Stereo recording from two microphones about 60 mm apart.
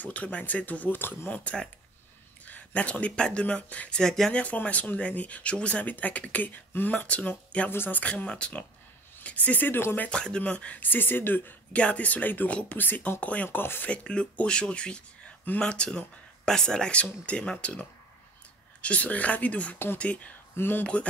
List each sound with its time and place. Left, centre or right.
0.0 s speech: left
1.3 s speech: left
4.0 s speech: centre
4.3 s speech: left
7.7 s speech: left
8.0 s speech: left
10.0 s speech: centre
10.8 s speech: left
11.7 s speech: left
13.8 s speech: centre
20.5 s speech: left
20.8 s speech: left